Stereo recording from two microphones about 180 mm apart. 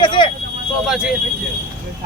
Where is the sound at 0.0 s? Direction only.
25° left (ahead or behind).